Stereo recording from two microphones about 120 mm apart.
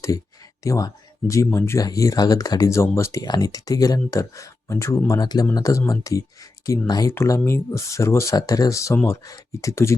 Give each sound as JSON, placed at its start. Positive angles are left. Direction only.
{"t": 0.6, "sound": "speech", "side_deg": 30}
{"t": 7.1, "sound": "speech", "side_deg": 20}